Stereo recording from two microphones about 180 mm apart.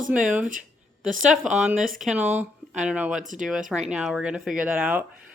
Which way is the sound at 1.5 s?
5° right (ahead or behind).